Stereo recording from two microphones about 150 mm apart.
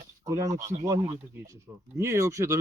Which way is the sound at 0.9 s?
35° right (ahead or behind).